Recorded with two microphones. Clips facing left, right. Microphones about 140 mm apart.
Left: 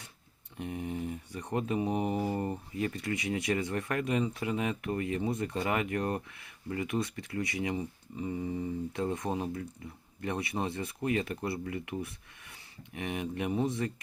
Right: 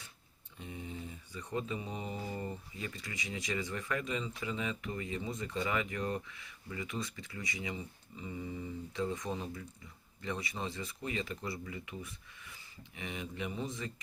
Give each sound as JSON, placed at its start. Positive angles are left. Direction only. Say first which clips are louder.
{"t": 0.5, "sound": "speech", "louder": "left 8 dB", "side_deg": 60}
{"t": 8.9, "sound": "speech", "louder": "even", "side_deg": 55}